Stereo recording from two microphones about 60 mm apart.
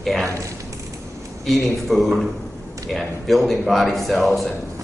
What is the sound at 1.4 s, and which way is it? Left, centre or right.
Speech, centre.